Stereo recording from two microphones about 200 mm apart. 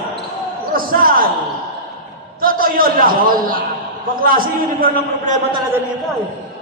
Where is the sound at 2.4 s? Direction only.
45° right (ahead or behind).